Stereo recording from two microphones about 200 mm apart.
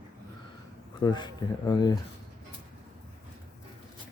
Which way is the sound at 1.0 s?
20° left (ahead or behind).